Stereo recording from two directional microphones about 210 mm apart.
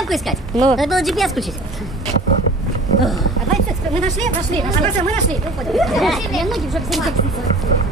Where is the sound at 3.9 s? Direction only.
35° right (ahead or behind).